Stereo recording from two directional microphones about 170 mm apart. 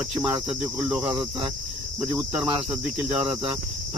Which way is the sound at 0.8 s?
5° right (ahead or behind).